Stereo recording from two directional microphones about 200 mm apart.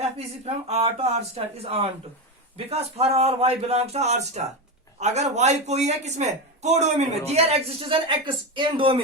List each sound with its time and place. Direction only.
0.0 s a man's voice: 30° right (ahead or behind)